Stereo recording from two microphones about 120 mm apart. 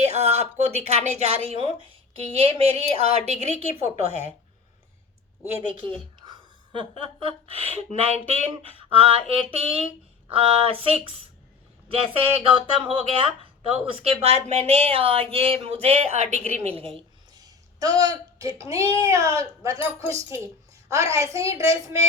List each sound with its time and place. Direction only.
0.0 s a woman's voice: 65° right (ahead or behind)
6.1 s a woman's voice: 40° right (ahead or behind); by 8.2 s 60° right (ahead or behind)
8.3 s a sound: 55° right (ahead or behind)
14.7 s speech: 55° right (ahead or behind)
16.6 s speech: 55° right (ahead or behind)
17.3 s a sound: 30° right (ahead or behind)
18.6 s speech: 25° right (ahead or behind)